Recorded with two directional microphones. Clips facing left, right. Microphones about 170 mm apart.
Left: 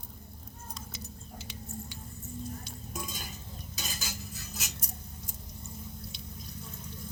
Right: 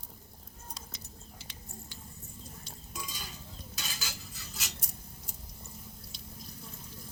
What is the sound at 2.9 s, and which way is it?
Cutlery, 50° left (ahead or behind).